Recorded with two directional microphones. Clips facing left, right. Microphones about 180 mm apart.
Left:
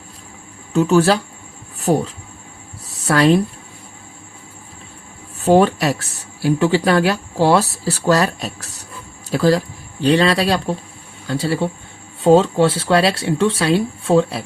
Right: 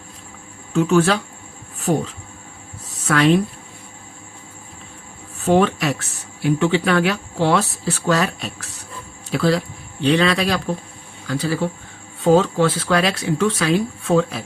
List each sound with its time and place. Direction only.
0.7 s speech: 35° left (ahead or behind)
5.4 s speech: 35° left (ahead or behind)